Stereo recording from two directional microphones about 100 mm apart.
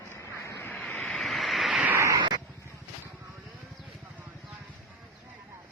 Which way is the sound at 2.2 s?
45° right (ahead or behind).